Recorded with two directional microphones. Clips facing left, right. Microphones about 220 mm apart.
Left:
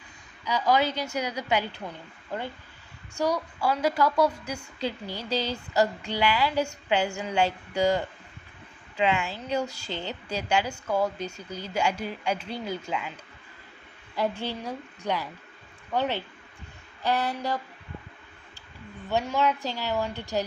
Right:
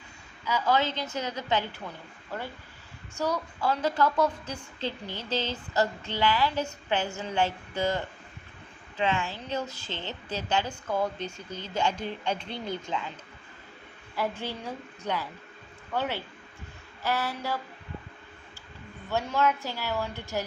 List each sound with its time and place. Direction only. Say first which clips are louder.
0.4 s a woman's voice: left 2 dB; 15° left (ahead or behind)
3.2 s a woman's voice: left 3 dB; 10° left (ahead or behind)
14.2 s a woman's voice: left 3 dB; 15° left (ahead or behind)
19.1 s a woman's voice: left 1 dB; 15° left (ahead or behind)